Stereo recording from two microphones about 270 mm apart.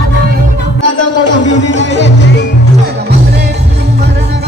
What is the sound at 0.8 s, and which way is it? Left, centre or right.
Music, left.